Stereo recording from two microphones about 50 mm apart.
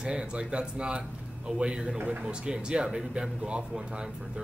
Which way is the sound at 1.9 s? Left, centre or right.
Right.